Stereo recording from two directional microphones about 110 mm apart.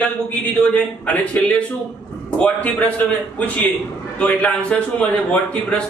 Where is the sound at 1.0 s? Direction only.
15° left (ahead or behind).